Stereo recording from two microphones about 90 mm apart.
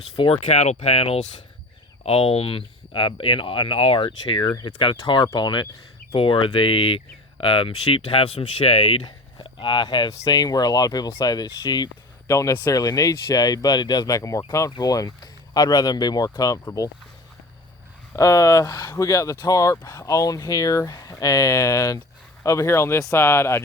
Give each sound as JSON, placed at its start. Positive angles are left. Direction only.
{"t": 0.2, "sound": "speech", "side_deg": 60}
{"t": 0.8, "sound": "speech", "side_deg": 90}
{"t": 6.1, "sound": "speech", "side_deg": 75}
{"t": 9.4, "sound": "speech", "side_deg": 65}
{"t": 10.3, "sound": "speech", "side_deg": 50}
{"t": 12.3, "sound": "speech", "side_deg": 35}
{"t": 18.2, "sound": "speech", "side_deg": 35}